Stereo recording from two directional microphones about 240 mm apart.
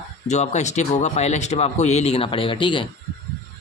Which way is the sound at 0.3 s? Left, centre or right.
Left.